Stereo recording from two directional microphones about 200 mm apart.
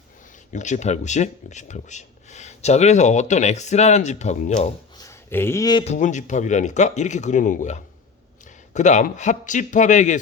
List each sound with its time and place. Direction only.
0.5 s speech: 35° left (ahead or behind)
4.9 s a sound: 15° left (ahead or behind)
5.8 s speech: 35° left (ahead or behind)